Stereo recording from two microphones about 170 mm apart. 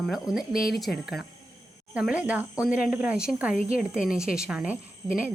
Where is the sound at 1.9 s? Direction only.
5° right (ahead or behind).